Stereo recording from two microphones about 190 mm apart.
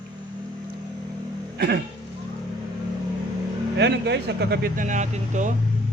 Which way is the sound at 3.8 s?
65° right (ahead or behind).